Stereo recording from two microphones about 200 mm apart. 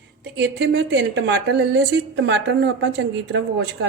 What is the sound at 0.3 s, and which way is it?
A woman's voice, 60° right (ahead or behind).